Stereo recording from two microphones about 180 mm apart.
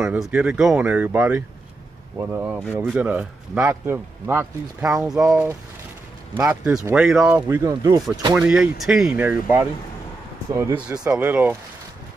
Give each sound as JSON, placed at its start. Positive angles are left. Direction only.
{"t": 0.0, "sound": "speech", "side_deg": -5}
{"t": 7.1, "sound": "speech", "side_deg": -5}
{"t": 8.4, "sound": "speech", "side_deg": -5}